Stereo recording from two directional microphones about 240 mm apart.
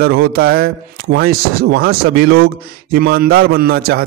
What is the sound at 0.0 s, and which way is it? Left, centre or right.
Speech, right.